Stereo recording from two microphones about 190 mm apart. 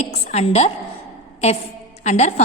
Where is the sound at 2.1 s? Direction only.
35° left (ahead or behind).